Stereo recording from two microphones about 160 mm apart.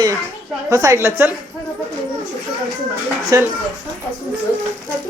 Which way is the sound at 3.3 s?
20° right (ahead or behind).